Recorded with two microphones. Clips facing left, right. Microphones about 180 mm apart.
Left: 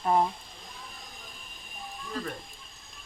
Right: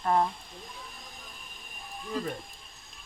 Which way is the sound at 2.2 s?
20° right (ahead or behind).